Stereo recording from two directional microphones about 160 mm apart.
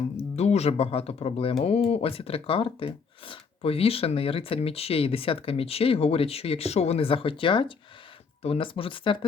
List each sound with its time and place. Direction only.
0.3 s speech: 45° left (ahead or behind)